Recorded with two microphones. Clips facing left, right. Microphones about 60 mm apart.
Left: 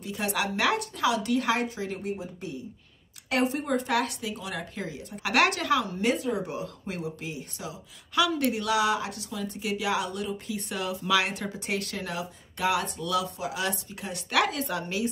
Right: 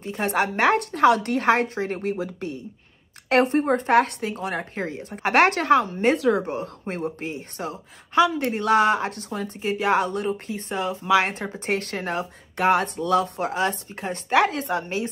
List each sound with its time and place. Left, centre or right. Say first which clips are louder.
0.0 s speech: right 6 dB; right
0.7 s a woman's voice: right 9 dB; right
2.1 s speech: right 7 dB; right
3.3 s speech: right 7 dB; right
6.1 s speech: right 8 dB; right
6.4 s a woman's voice: right 5 dB; right
8.1 s speech: right 5 dB; right